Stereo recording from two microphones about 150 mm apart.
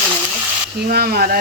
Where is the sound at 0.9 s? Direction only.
90° right.